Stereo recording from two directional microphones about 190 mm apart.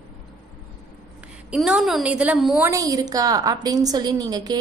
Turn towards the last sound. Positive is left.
turn(degrees=-20)  # may be behind; listen again after turning